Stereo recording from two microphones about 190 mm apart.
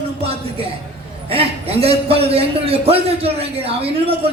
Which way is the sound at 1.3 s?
30° right (ahead or behind).